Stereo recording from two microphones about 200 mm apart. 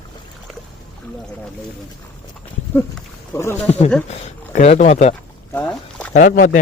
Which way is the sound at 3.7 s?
30° left (ahead or behind).